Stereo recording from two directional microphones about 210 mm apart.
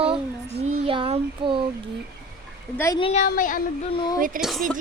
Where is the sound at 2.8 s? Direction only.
15° left (ahead or behind).